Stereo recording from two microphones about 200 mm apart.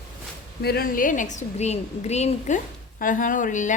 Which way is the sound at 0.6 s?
50° left (ahead or behind).